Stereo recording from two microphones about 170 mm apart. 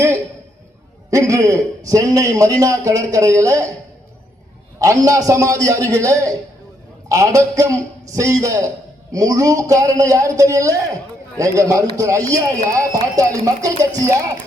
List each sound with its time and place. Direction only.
1.1 s a man's voice: 20° right (ahead or behind)
4.8 s a man's voice: 20° right (ahead or behind)